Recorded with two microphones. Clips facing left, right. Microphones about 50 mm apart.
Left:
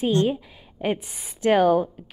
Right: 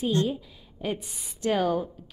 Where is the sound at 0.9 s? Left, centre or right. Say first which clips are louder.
Left 2 dB; left.